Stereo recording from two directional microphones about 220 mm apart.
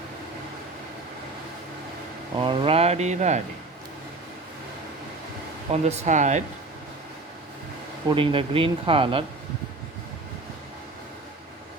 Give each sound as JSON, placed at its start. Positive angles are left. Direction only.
{"t": 2.3, "sound": "speech", "side_deg": -25}
{"t": 5.8, "sound": "speech", "side_deg": -30}
{"t": 8.1, "sound": "speech", "side_deg": -25}